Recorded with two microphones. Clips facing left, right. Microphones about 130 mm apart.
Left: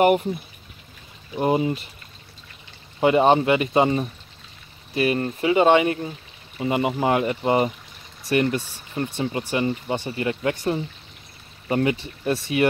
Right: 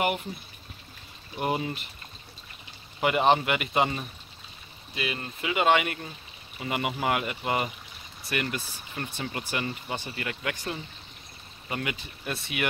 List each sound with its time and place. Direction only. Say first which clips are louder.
1.4 s speech: left 8 dB; 25° left (ahead or behind)
3.0 s speech: left 6 dB; 30° left (ahead or behind)
4.9 s speech: left 12 dB; 40° left (ahead or behind)